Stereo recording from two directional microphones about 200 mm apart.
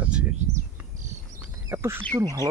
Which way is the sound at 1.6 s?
10° right (ahead or behind).